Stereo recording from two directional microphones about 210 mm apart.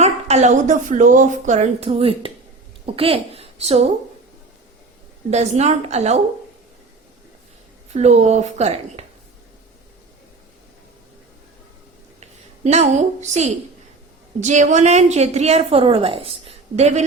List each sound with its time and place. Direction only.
0.0 s a woman's voice: 35° right (ahead or behind)
5.3 s a woman's voice: 30° right (ahead or behind)
7.9 s a woman's voice: 30° right (ahead or behind)
12.2 s a woman's voice: 30° right (ahead or behind)